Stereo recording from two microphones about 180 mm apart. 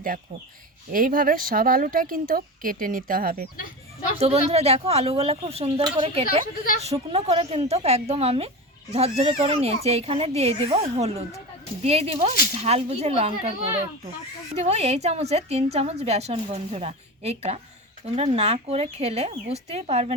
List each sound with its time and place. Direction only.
0.9 s speech: 50° right (ahead or behind)
4.2 s a woman's voice: 35° right (ahead or behind)